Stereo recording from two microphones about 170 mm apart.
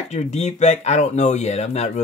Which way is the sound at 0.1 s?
40° left (ahead or behind).